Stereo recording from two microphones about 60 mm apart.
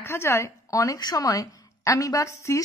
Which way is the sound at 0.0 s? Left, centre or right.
Left.